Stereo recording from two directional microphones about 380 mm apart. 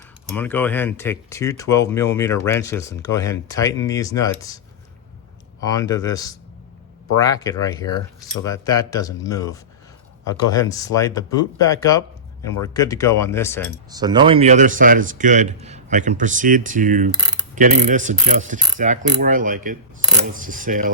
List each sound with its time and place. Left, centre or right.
0.3 s speech: centre
5.6 s speech: centre
13.9 s speech: centre